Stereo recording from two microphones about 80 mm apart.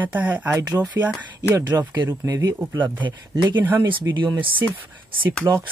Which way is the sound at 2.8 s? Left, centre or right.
Right.